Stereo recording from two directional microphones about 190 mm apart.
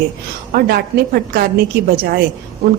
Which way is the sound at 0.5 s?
50° right (ahead or behind).